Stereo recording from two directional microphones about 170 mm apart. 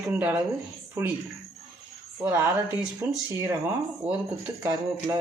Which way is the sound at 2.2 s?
15° right (ahead or behind).